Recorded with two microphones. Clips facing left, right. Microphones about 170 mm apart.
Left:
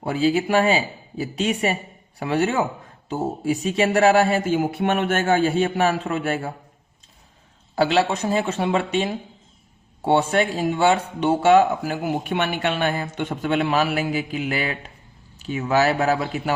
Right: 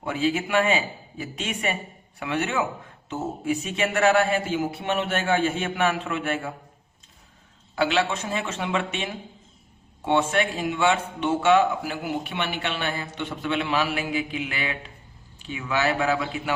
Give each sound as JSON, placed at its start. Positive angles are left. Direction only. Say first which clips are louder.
{"t": 0.0, "sound": "speech", "louder": "left 5 dB", "side_deg": 35}
{"t": 7.8, "sound": "a man's voice", "louder": "left 4 dB", "side_deg": 35}